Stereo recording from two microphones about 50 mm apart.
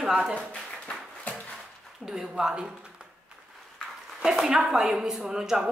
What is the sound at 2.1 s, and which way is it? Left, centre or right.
Speech, centre.